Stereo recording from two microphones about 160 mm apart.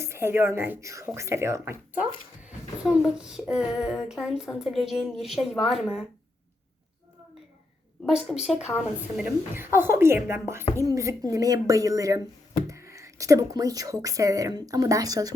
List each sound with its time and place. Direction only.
0.0 s speech: 15° right (ahead or behind)
8.0 s speech: 5° right (ahead or behind); by 15.3 s 25° right (ahead or behind)